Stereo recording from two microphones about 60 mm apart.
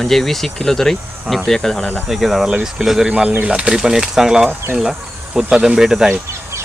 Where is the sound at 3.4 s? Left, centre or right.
Centre.